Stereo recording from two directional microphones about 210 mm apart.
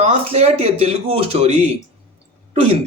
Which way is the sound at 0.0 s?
30° right (ahead or behind).